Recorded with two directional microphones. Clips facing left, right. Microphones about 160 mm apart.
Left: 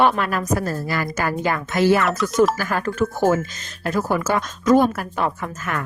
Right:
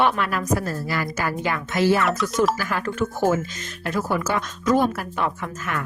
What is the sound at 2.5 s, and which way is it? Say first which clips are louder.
Speech: left 3 dB; 45° left (ahead or behind).